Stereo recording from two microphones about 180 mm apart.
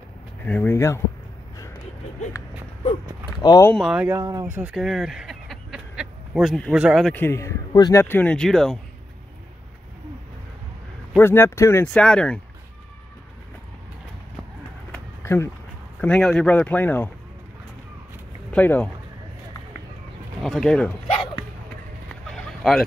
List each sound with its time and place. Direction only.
0.5 s speech: 10° left (ahead or behind)
3.3 s speech: 25° left (ahead or behind)
3.7 s speech: 5° right (ahead or behind)
4.2 s speech: 20° right (ahead or behind)
4.6 s speech: 5° right (ahead or behind)
7.2 s speech: 15° left (ahead or behind)
11.1 s speech: 10° left (ahead or behind)
14.9 s a sound: 15° left (ahead or behind)
16.0 s speech: 5° left (ahead or behind)
18.5 s speech: 10° left (ahead or behind)
20.4 s speech: 5° left (ahead or behind)
21.1 s hiccup: 25° left (ahead or behind)
22.3 s a sound: centre (ahead or behind)